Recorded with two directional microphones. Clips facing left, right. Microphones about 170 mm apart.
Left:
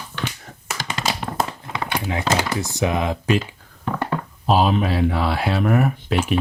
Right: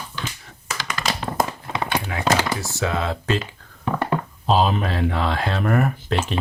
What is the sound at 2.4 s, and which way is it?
Speech, 15° left (ahead or behind).